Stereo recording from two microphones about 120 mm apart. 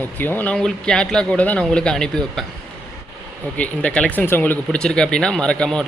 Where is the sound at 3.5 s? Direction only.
10° left (ahead or behind).